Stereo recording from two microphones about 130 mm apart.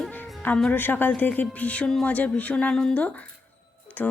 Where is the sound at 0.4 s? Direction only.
10° left (ahead or behind).